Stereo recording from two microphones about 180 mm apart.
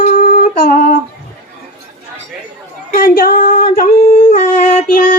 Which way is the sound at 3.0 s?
55° left (ahead or behind).